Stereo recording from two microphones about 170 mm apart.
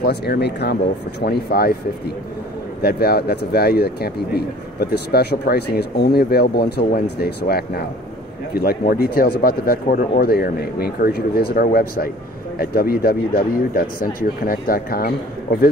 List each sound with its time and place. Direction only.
0.0 s speech: 70° left (ahead or behind)
1.2 s speech: 65° left (ahead or behind)